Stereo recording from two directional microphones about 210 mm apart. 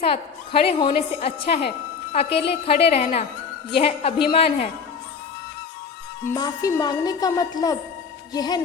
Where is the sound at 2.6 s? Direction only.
30° left (ahead or behind).